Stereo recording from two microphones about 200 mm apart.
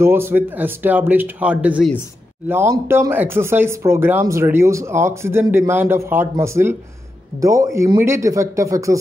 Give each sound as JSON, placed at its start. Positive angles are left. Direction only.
{"t": 0.0, "sound": "speech", "side_deg": -10}